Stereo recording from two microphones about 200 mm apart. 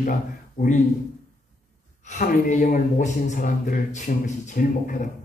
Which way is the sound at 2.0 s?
40° left (ahead or behind).